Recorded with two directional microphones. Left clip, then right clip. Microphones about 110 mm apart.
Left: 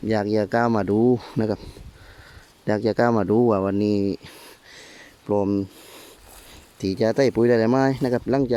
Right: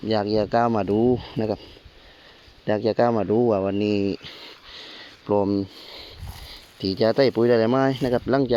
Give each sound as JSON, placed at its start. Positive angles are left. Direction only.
{"t": 0.1, "sound": "speech", "side_deg": 55}
{"t": 2.6, "sound": "speech", "side_deg": 50}
{"t": 5.2, "sound": "speech", "side_deg": 25}
{"t": 6.7, "sound": "speech", "side_deg": 45}